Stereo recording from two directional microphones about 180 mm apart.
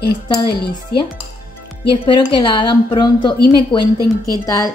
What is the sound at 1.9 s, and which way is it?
A woman's voice, 25° left (ahead or behind).